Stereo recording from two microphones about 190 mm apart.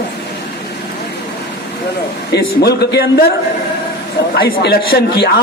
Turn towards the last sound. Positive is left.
turn(degrees=60)  # may be behind; listen again after turning